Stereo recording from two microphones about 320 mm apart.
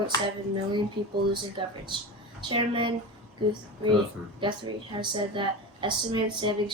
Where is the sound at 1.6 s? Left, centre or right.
Centre.